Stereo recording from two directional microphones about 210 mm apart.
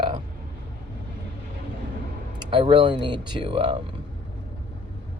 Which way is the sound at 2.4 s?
20° right (ahead or behind).